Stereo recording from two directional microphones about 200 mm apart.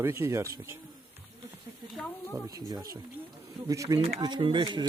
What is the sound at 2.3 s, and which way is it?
Speech, 20° right (ahead or behind).